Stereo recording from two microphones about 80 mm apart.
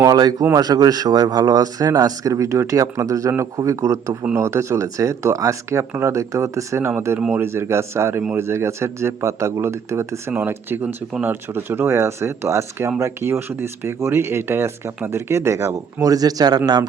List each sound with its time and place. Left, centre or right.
0.5 s a man's voice: right